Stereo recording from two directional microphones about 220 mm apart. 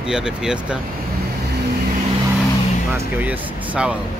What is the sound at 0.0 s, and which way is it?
Speech, 5° right (ahead or behind).